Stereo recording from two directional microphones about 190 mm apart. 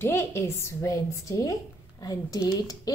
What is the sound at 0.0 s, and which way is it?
A woman's voice, 15° left (ahead or behind).